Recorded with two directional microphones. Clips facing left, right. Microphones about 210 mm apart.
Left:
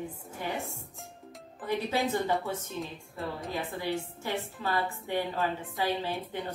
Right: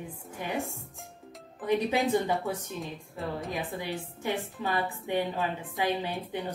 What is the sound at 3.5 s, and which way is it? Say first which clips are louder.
A woman's voice: left 1 dB; 15° right (ahead or behind).